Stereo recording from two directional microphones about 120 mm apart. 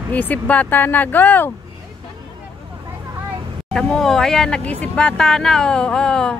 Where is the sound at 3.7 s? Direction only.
5° left (ahead or behind).